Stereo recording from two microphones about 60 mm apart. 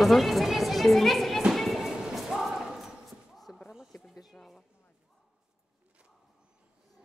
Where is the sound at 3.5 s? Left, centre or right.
Left.